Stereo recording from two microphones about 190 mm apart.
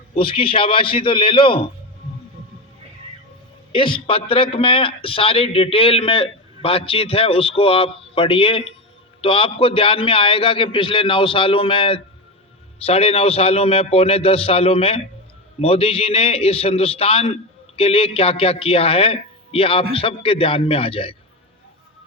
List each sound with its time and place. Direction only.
0.2 s a man's voice: 30° left (ahead or behind)
3.7 s a man's voice: 25° left (ahead or behind)